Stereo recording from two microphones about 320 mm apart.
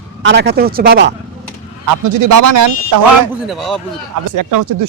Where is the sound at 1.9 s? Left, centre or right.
Right.